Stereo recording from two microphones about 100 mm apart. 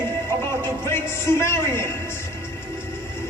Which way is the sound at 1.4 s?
25° left (ahead or behind).